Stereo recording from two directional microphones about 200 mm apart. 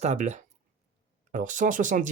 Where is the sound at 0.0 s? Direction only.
35° right (ahead or behind).